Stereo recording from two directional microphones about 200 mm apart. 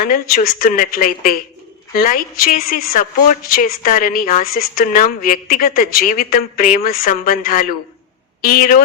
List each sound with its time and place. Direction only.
0.0 s a woman's voice: 45° left (ahead or behind)